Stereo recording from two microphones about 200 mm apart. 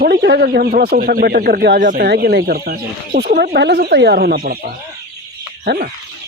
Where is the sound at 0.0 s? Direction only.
55° right (ahead or behind).